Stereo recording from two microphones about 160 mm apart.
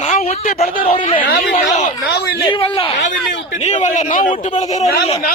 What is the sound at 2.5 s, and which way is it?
Speech, 35° left (ahead or behind).